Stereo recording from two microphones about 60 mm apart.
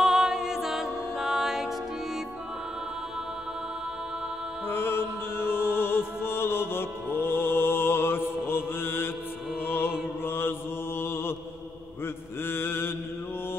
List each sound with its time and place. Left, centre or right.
0.0 s music: centre
4.6 s mantra: left
5.4 s music: left
10.2 s mantra: left
12.4 s mantra: left